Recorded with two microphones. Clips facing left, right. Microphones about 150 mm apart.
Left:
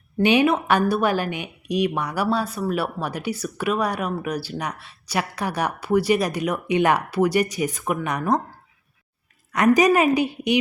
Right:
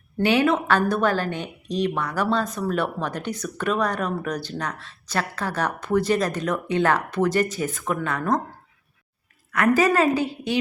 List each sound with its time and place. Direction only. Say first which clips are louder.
0.2 s a woman's voice: left 2 dB; 15° left (ahead or behind)
9.7 s a woman's voice: left 1 dB; 15° left (ahead or behind)